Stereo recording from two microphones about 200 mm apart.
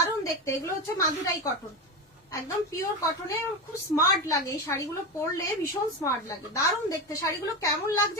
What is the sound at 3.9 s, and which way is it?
Speech, 15° left (ahead or behind).